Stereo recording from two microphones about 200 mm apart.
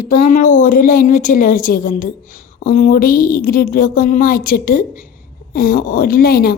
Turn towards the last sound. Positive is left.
turn(degrees=50)  # may be behind; listen again after turning